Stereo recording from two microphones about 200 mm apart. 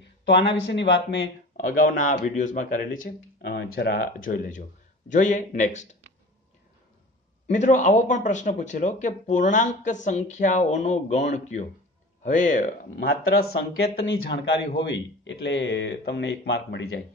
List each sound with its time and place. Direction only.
0.2 s speech: 60° left (ahead or behind)
1.8 s speech: 40° left (ahead or behind)
7.4 s speech: 35° left (ahead or behind)
14.9 s speech: 60° left (ahead or behind)